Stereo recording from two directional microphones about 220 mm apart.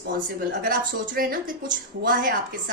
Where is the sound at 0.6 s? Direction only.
40° right (ahead or behind).